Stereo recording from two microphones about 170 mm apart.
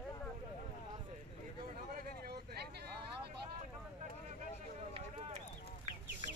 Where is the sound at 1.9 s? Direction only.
60° right (ahead or behind).